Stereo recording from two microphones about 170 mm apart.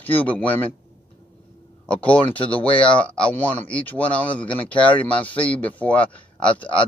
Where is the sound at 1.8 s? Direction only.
10° left (ahead or behind).